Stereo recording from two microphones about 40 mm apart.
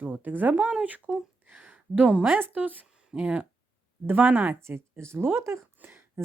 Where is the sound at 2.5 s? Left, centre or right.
Right.